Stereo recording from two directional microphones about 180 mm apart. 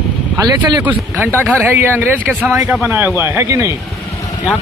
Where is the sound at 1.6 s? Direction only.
10° right (ahead or behind).